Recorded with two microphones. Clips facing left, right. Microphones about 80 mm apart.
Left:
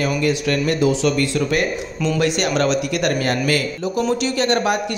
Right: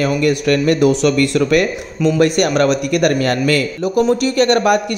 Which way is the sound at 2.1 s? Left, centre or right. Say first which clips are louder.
Right 5 dB; right.